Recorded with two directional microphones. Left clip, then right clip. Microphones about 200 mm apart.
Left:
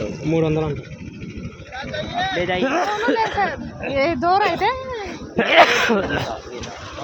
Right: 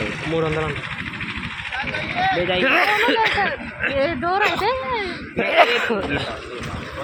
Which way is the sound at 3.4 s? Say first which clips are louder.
Right 1 dB; 20° left (ahead or behind).